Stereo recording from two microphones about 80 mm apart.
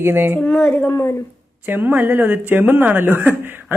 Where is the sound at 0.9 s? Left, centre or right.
Left.